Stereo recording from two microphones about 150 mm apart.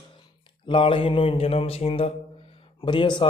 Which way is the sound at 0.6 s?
35° left (ahead or behind).